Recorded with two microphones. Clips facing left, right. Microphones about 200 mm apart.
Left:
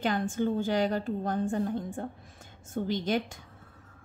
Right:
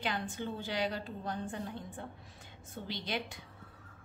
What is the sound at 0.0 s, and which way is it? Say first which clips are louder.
A woman's voice: left 9 dB; 45° left (ahead or behind).